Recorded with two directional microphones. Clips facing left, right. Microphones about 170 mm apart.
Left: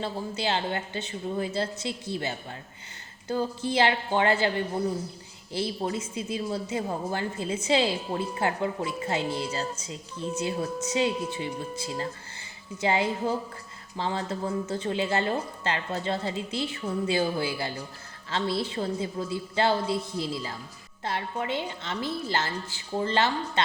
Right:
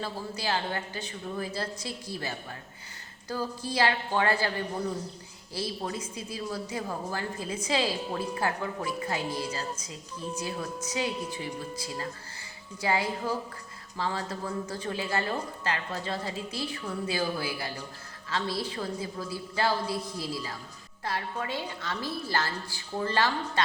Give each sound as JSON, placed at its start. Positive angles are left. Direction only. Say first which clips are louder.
{"t": 0.0, "sound": "a woman's voice", "louder": "left 4 dB", "side_deg": 25}
{"t": 5.5, "sound": "a woman's voice", "louder": "left 4 dB", "side_deg": 25}